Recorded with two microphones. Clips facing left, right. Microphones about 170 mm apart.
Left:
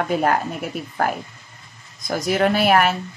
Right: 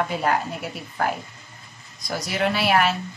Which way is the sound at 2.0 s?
50° left (ahead or behind).